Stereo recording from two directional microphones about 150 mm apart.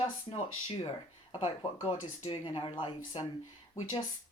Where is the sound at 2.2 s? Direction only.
35° left (ahead or behind).